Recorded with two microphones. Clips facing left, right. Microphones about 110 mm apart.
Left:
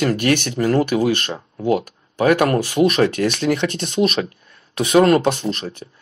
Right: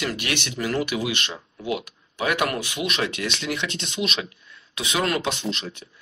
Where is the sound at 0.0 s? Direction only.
45° left (ahead or behind).